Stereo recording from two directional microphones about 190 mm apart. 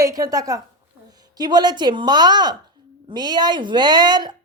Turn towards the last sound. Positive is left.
turn(degrees=-20)  # may be behind; listen again after turning